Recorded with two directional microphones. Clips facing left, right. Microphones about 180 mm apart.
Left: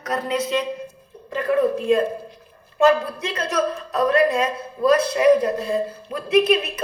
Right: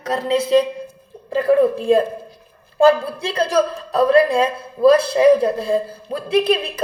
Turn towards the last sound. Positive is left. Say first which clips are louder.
# even
turn(degrees=-30)  # may be behind; listen again after turning